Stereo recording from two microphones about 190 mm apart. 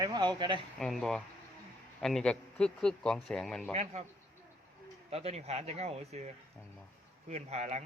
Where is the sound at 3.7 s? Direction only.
35° right (ahead or behind).